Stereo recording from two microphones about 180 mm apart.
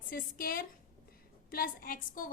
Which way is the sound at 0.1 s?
55° left (ahead or behind).